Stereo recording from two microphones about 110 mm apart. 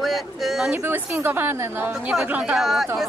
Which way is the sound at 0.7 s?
15° right (ahead or behind).